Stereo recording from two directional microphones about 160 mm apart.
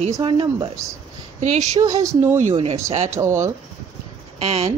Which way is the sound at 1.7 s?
20° right (ahead or behind).